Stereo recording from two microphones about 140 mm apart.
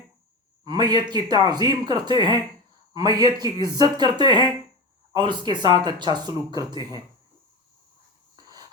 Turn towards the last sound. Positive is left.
turn(degrees=-30)  # may be behind; listen again after turning